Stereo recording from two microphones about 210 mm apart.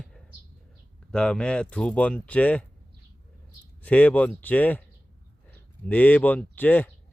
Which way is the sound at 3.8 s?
5° left (ahead or behind).